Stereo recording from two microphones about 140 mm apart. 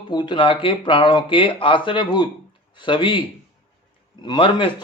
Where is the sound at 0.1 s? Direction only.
35° left (ahead or behind).